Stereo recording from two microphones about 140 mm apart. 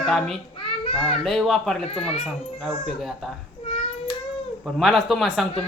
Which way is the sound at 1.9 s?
45° left (ahead or behind).